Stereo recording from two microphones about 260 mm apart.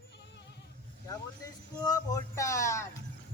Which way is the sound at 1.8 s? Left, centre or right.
Centre.